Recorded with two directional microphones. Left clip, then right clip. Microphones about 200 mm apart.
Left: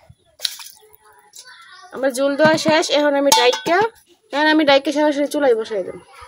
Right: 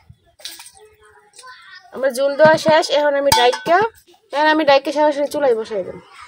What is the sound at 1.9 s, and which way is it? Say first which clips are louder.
Speech: right 1 dB; 10° left (ahead or behind).